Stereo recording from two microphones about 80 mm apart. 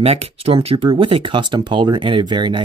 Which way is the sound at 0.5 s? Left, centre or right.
Right.